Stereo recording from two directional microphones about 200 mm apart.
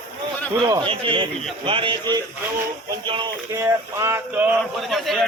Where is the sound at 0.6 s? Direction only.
20° right (ahead or behind).